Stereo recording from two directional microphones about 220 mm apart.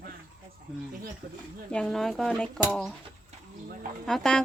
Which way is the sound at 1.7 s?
Centre (ahead or behind).